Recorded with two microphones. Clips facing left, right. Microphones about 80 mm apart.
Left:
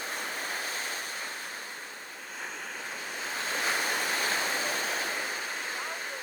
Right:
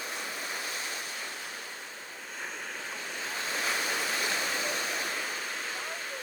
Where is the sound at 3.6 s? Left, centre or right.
Left.